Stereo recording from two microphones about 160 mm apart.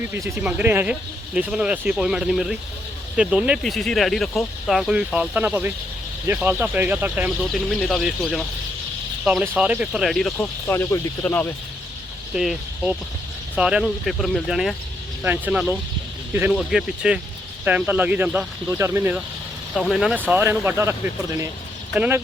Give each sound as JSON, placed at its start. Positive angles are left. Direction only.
{"t": 0.2, "sound": "speech", "side_deg": -10}
{"t": 7.5, "sound": "speech", "side_deg": 0}
{"t": 10.3, "sound": "speech", "side_deg": 15}
{"t": 12.3, "sound": "speech", "side_deg": -5}
{"t": 19.7, "sound": "speech", "side_deg": 0}
{"t": 21.9, "sound": "speech", "side_deg": -10}